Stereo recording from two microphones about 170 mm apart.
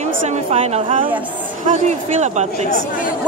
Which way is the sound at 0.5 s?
35° right (ahead or behind).